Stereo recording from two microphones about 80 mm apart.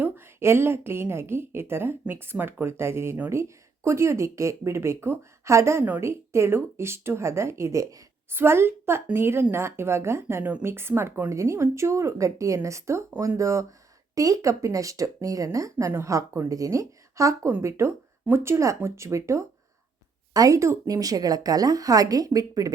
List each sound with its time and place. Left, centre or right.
0.0 s a woman's voice: right
8.3 s a woman's voice: right